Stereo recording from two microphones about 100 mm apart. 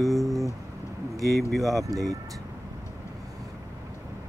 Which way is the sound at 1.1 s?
35° right (ahead or behind).